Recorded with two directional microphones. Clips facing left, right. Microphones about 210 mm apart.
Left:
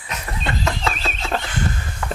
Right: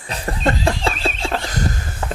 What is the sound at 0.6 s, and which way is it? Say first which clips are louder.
Laughter: right 4 dB; 30° right (ahead or behind).